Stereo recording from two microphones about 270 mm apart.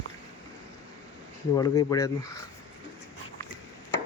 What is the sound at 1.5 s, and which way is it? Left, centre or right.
Speech, centre.